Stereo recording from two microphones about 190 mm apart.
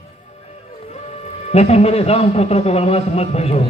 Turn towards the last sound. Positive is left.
turn(degrees=35)  # may be behind; listen again after turning